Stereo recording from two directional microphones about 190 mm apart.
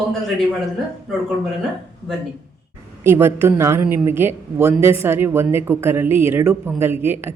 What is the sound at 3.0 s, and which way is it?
Speech, 10° right (ahead or behind).